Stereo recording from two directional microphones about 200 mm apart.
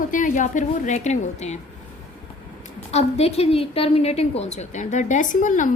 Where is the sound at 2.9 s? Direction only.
30° left (ahead or behind).